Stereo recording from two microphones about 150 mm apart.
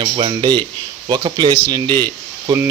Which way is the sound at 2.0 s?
25° right (ahead or behind).